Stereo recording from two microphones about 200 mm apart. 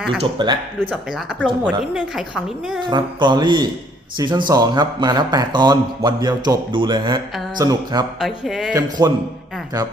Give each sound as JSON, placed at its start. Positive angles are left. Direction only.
{"t": 0.2, "sound": "speech", "side_deg": -25}
{"t": 0.8, "sound": "speech", "side_deg": 0}
{"t": 2.9, "sound": "speech", "side_deg": -20}
{"t": 8.2, "sound": "speech", "side_deg": 0}
{"t": 8.7, "sound": "speech", "side_deg": -20}